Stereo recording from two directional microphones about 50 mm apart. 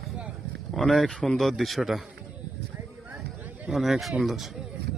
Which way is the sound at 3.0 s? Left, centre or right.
Right.